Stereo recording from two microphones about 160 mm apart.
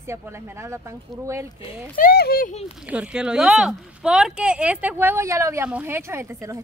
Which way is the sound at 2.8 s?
5° right (ahead or behind).